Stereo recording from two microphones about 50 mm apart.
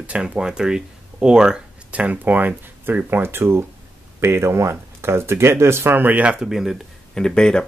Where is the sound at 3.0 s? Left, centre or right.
Right.